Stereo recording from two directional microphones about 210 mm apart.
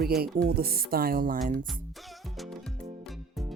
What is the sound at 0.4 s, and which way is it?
Speech, 45° right (ahead or behind).